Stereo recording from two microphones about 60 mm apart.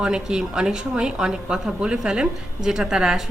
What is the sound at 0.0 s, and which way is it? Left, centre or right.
A woman's voice, centre.